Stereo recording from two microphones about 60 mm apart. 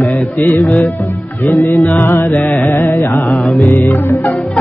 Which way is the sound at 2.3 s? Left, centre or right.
Left.